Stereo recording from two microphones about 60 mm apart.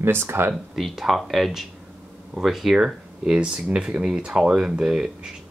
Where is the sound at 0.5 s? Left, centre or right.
Centre.